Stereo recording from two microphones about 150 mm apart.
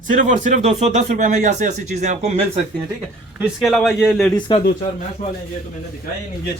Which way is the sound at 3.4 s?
Centre (ahead or behind).